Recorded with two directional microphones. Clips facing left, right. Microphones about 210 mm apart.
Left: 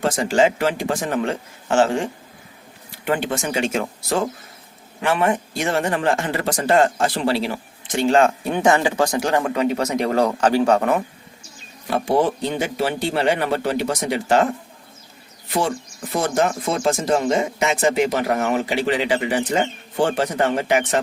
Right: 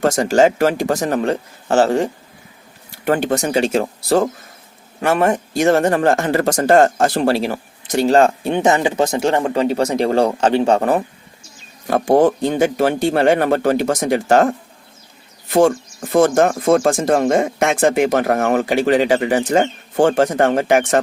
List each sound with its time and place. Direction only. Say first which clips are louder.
0.0 s speech: right 4 dB; 45° right (ahead or behind)
11.9 s speech: right 6 dB; 50° right (ahead or behind)